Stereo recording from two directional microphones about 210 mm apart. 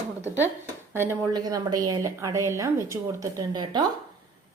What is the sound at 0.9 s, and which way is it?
A woman's voice, 10° right (ahead or behind).